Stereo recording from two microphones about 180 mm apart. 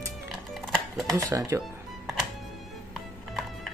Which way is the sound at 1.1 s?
20° right (ahead or behind).